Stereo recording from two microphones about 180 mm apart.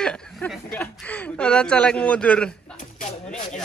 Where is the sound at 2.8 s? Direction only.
45° left (ahead or behind).